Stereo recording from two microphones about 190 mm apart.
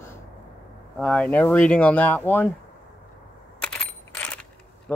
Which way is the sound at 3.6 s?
5° left (ahead or behind).